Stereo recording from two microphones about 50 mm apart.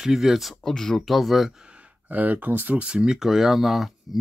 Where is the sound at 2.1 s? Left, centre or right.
Right.